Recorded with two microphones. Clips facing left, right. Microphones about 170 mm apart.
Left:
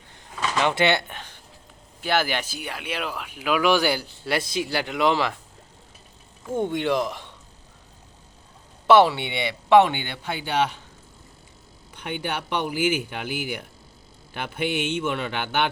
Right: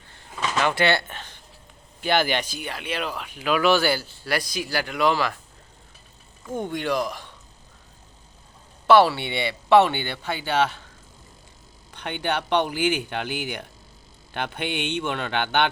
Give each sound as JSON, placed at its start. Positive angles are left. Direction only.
{"t": 0.6, "sound": "speech", "side_deg": 20}
{"t": 6.5, "sound": "speech", "side_deg": 25}
{"t": 8.9, "sound": "speech", "side_deg": 20}
{"t": 11.9, "sound": "speech", "side_deg": 10}